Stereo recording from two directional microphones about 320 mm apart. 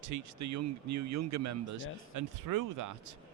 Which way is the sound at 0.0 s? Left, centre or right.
Right.